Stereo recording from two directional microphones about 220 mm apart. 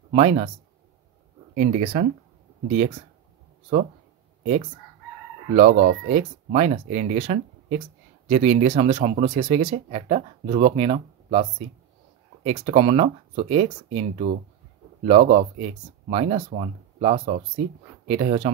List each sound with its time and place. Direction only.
0.1 s speech: 30° right (ahead or behind)
1.5 s speech: 35° right (ahead or behind)
5.5 s speech: 30° right (ahead or behind)
12.4 s speech: 25° right (ahead or behind)